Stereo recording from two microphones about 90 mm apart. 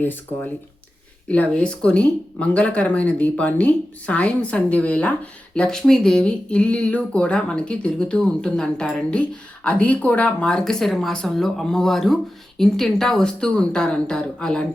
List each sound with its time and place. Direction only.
0.0 s speech: 20° left (ahead or behind)